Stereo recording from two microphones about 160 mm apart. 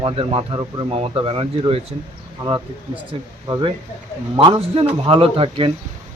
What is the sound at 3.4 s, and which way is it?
Speech, 20° right (ahead or behind).